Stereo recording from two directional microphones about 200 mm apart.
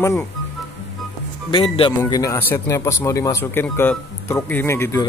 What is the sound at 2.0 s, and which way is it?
A man's voice, 15° left (ahead or behind).